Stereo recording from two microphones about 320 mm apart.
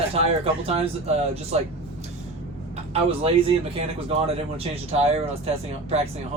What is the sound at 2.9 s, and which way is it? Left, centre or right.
Speech, centre.